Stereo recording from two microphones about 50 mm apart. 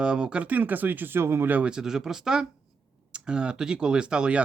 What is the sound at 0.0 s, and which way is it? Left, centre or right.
Speech, centre.